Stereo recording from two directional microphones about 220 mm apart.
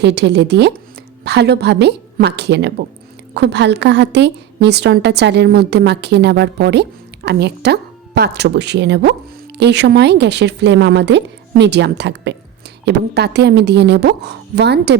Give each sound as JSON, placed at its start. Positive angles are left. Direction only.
{"t": 0.0, "sound": "a woman's voice", "side_deg": -50}